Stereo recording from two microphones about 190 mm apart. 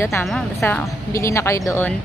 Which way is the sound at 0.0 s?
15° left (ahead or behind).